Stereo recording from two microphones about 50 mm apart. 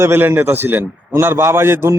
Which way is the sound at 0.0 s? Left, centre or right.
Right.